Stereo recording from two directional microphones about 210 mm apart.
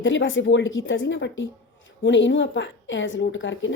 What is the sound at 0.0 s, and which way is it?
Speech, 65° left (ahead or behind).